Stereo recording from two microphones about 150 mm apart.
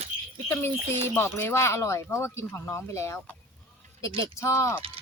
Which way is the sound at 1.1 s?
15° left (ahead or behind).